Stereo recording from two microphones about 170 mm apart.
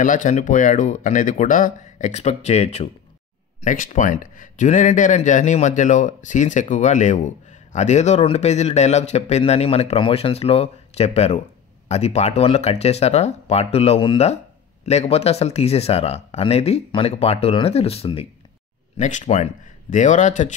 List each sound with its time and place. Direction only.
0.0 s speech: 50° left (ahead or behind)
3.6 s speech: 50° left (ahead or behind)
18.9 s speech: 45° left (ahead or behind)